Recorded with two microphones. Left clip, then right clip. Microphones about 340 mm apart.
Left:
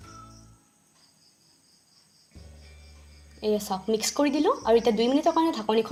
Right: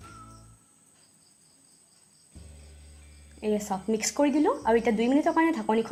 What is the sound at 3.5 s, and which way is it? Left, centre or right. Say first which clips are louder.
A woman's voice: left 1 dB; left.